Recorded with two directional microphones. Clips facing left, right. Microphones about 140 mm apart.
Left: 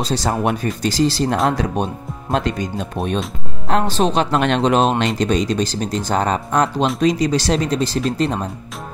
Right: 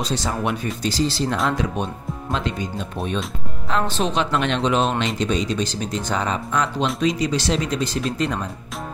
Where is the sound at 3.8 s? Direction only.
35° left (ahead or behind).